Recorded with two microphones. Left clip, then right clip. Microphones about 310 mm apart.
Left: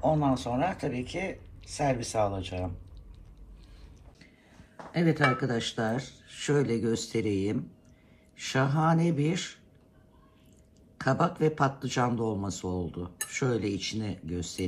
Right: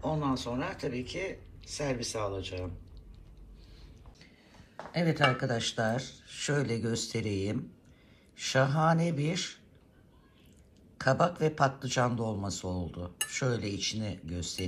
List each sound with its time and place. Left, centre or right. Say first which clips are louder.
0.0 s speech: left 6 dB; centre
4.9 s speech: left 2 dB; centre
11.0 s speech: even; right